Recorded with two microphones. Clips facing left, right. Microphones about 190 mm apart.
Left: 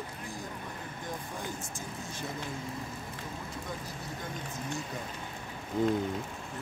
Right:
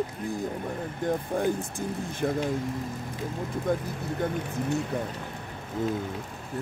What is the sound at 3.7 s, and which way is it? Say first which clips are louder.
Speech: right 11 dB; 60° right (ahead or behind).